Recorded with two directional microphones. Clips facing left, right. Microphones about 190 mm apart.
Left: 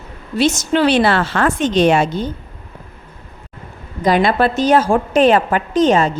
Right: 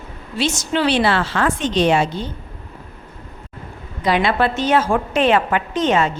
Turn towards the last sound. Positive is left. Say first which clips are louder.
# left 4 dB
turn(degrees=35)  # may be behind; listen again after turning